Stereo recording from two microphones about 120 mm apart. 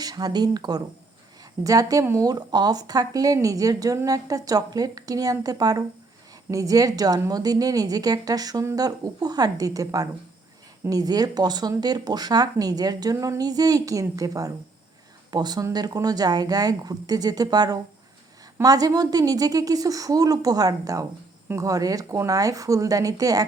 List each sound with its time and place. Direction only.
0.0 s speech: 35° right (ahead or behind)